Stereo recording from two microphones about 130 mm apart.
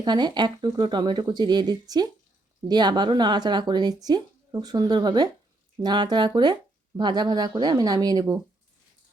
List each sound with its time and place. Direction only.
0.0 s speech: 35° right (ahead or behind)